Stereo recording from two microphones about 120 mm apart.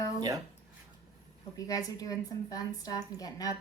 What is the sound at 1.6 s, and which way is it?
A woman's voice, 30° left (ahead or behind).